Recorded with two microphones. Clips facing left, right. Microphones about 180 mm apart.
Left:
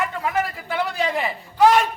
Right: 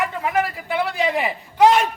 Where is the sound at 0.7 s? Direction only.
15° right (ahead or behind).